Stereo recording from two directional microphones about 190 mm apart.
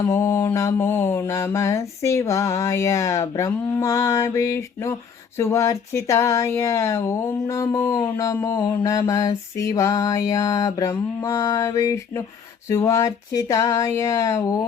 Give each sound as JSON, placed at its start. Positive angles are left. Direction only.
{"t": 0.1, "sound": "speech", "side_deg": 15}